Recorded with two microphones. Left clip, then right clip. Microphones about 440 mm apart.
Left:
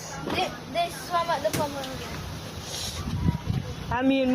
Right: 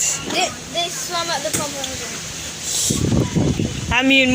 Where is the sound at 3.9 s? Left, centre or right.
Left.